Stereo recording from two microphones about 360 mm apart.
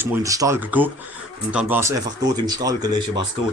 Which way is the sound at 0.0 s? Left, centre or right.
Centre.